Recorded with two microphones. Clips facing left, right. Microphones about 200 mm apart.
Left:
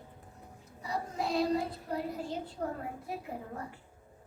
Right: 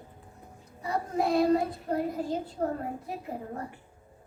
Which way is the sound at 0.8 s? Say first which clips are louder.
Right 6 dB; 55° right (ahead or behind).